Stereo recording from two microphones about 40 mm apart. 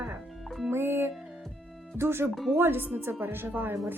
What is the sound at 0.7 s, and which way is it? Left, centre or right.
Music, right.